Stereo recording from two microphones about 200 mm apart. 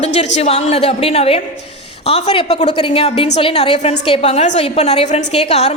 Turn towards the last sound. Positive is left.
turn(degrees=35)  # may be behind; listen again after turning